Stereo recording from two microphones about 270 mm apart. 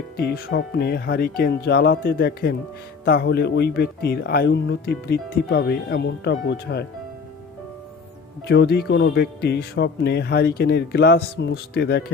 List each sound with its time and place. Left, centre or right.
0.2 s speech: left
8.4 s speech: left